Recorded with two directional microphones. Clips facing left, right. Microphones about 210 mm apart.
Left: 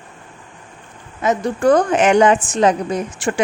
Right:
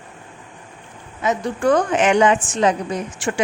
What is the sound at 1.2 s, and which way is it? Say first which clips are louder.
Speech: left 3 dB; 40° left (ahead or behind).